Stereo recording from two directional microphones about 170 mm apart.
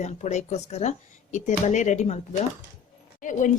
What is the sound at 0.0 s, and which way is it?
Speech, 40° left (ahead or behind).